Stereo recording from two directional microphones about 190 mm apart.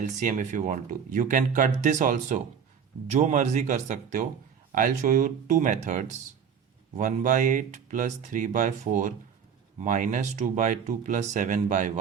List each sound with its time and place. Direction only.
0.0 s speech: 40° right (ahead or behind)